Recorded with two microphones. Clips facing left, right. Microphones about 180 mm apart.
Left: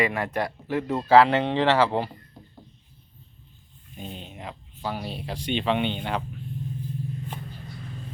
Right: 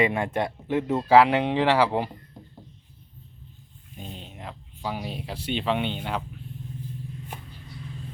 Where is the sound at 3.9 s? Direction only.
Centre (ahead or behind).